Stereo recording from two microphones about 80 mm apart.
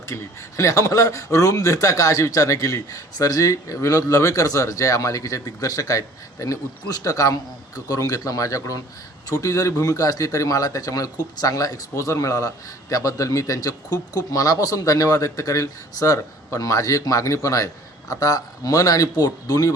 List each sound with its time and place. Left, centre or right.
0.1 s speech: left